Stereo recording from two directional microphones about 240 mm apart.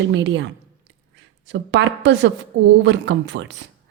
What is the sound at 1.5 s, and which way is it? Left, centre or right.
A woman's voice, right.